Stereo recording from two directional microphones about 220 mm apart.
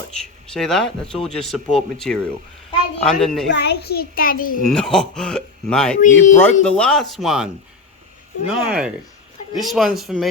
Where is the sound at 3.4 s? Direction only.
50° left (ahead or behind).